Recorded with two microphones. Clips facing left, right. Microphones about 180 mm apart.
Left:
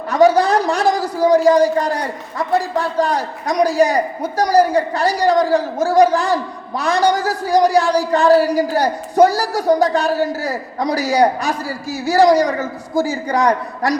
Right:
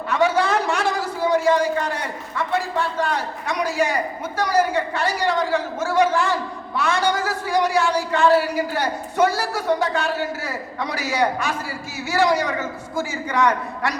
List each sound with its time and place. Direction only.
0.1 s a man's voice: 40° left (ahead or behind)